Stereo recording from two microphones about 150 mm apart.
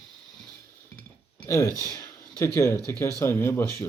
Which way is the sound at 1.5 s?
20° left (ahead or behind).